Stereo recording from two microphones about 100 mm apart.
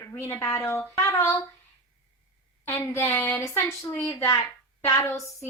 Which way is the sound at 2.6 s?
25° left (ahead or behind).